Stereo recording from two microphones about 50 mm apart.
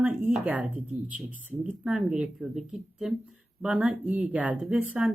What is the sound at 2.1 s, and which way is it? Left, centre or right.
Speech, centre.